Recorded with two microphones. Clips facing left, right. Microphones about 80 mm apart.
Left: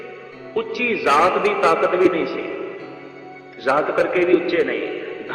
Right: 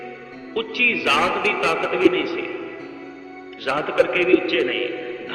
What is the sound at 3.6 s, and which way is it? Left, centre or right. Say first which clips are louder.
A man's voice: left 2 dB; left.